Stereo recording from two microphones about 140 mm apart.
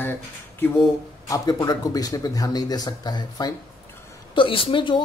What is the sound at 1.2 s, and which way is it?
Speech, 25° left (ahead or behind).